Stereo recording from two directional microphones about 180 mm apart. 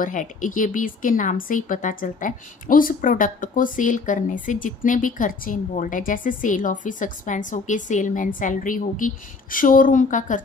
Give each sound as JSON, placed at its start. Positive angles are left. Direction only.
{"t": 0.0, "sound": "speech", "side_deg": 45}